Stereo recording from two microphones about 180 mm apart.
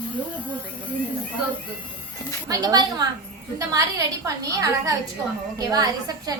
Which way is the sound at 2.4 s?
20° right (ahead or behind).